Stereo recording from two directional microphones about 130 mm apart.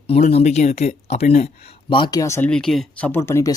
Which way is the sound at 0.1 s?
50° left (ahead or behind).